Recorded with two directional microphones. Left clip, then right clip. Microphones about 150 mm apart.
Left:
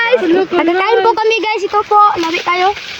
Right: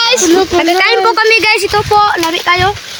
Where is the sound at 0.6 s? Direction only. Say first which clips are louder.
Right 3 dB; 45° left (ahead or behind).